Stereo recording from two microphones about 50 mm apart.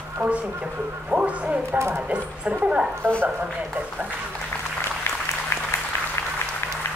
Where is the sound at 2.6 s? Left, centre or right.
Right.